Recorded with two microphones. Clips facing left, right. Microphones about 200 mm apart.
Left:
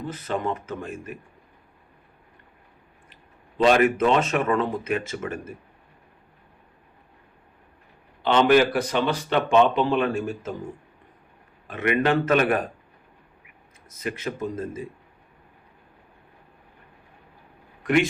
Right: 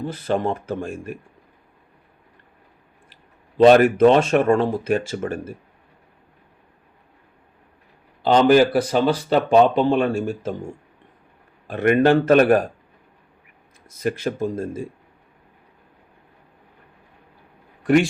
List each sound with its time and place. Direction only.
0.0 s speech: 30° right (ahead or behind)
3.6 s speech: 40° right (ahead or behind)
8.2 s speech: 35° right (ahead or behind)
11.7 s speech: 40° right (ahead or behind)
14.0 s speech: 35° right (ahead or behind)
17.8 s speech: 35° right (ahead or behind)